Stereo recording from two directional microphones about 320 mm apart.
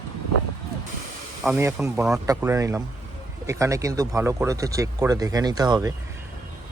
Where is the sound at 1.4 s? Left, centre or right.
Centre.